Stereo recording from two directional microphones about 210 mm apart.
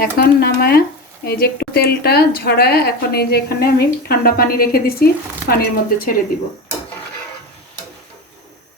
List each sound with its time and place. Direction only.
0.0 s speech: 45° left (ahead or behind)